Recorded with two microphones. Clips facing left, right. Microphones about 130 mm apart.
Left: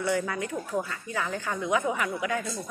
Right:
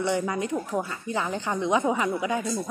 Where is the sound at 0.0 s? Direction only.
20° right (ahead or behind).